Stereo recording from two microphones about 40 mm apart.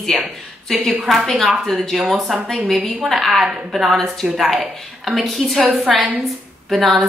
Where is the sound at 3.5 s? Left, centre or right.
Centre.